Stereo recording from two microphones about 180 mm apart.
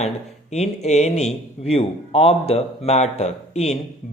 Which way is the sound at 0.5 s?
40° left (ahead or behind).